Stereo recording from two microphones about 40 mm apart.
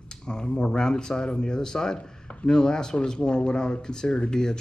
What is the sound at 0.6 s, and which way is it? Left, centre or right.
Speech, centre.